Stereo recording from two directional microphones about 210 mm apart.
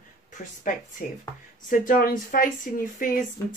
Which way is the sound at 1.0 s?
40° left (ahead or behind).